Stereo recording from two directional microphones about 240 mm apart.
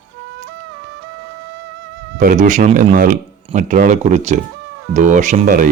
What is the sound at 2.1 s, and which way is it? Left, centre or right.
Speech, right.